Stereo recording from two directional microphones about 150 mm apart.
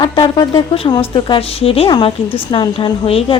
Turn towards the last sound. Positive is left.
turn(degrees=35)  # may be behind; listen again after turning